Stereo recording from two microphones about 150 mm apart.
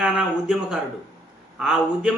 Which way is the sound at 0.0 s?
5° right (ahead or behind).